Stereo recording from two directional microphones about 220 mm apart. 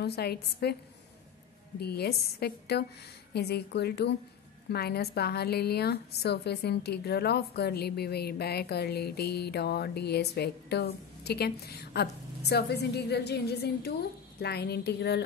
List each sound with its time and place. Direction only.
0.0 s a woman's voice: 45° left (ahead or behind)
1.8 s a woman's voice: 45° left (ahead or behind)